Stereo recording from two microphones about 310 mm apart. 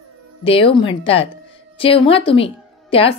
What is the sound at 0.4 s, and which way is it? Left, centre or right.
Speech, centre.